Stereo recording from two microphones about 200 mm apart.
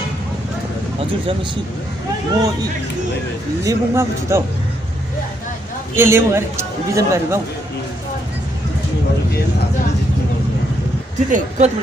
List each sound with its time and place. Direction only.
3.6 s a man's voice: 15° right (ahead or behind)
5.9 s a man's voice: 10° right (ahead or behind)
11.2 s speech: 40° right (ahead or behind)